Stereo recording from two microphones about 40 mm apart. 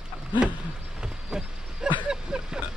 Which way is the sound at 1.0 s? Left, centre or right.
Centre.